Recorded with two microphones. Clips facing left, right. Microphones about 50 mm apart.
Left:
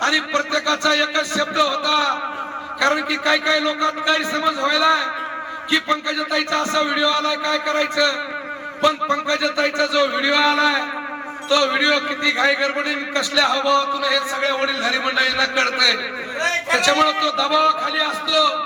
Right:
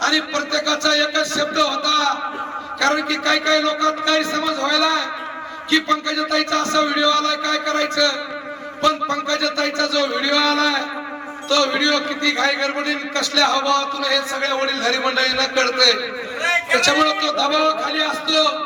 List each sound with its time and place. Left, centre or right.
0.0 s a man's voice: centre